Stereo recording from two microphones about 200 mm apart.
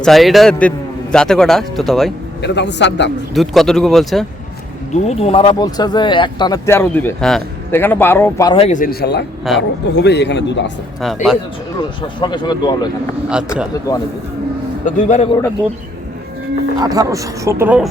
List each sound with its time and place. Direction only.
0.0 s speech: centre (ahead or behind)
2.4 s speech: 60° left (ahead or behind)
3.3 s speech: centre (ahead or behind)
4.9 s speech: 35° left (ahead or behind); by 8.5 s 15° left (ahead or behind)
8.5 s speech: 35° left (ahead or behind); by 10.6 s 60° left (ahead or behind)
11.0 s speech: centre (ahead or behind)
12.2 s speech: 25° left (ahead or behind)
14.8 s a man's voice: 35° left (ahead or behind)
16.7 s speech: 20° right (ahead or behind)